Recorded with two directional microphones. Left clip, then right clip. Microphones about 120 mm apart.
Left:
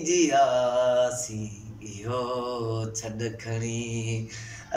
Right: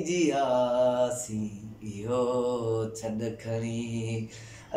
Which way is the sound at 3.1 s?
40° right (ahead or behind).